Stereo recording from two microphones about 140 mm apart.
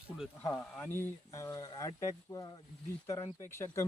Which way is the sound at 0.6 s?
15° left (ahead or behind).